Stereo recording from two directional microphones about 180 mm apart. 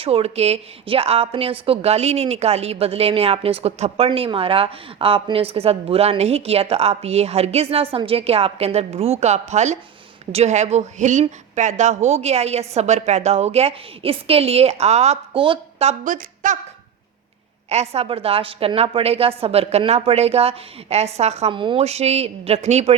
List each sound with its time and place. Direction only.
0.0 s a woman's voice: 35° right (ahead or behind)
17.7 s a woman's voice: 35° right (ahead or behind)